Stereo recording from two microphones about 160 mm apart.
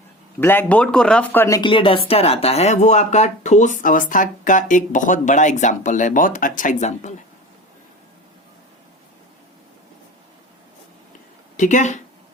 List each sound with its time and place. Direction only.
0.3 s speech: 15° left (ahead or behind)
1.6 s speech: 35° left (ahead or behind)
11.5 s speech: 50° left (ahead or behind)